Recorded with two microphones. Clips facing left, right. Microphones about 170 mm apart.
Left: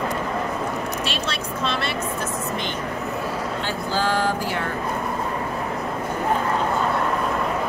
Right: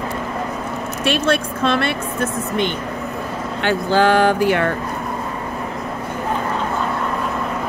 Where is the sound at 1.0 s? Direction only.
55° right (ahead or behind).